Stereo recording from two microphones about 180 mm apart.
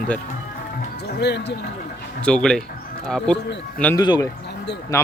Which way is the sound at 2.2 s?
5° left (ahead or behind).